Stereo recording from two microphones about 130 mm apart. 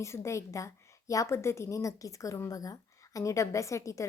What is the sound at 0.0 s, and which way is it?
A woman's voice, 20° left (ahead or behind).